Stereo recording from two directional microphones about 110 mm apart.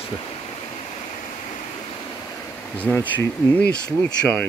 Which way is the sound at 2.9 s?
15° left (ahead or behind).